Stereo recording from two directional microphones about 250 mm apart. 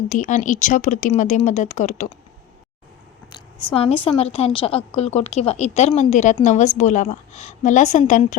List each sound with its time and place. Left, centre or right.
0.1 s a woman's voice: left
3.3 s a woman's voice: left